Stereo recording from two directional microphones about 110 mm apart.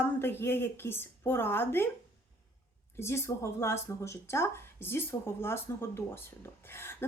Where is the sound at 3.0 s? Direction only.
25° left (ahead or behind).